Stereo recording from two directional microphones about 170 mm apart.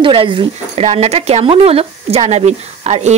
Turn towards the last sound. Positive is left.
turn(degrees=-40)  # may be behind; listen again after turning